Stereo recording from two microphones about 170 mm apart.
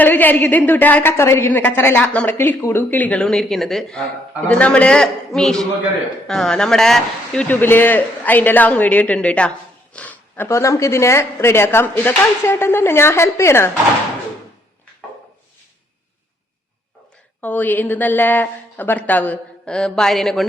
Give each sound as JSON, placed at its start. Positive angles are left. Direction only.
{"t": 0.0, "sound": "a woman's voice", "side_deg": 10}
{"t": 17.4, "sound": "a woman's voice", "side_deg": 10}